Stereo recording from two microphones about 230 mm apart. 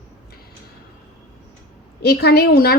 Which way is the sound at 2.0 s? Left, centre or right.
Left.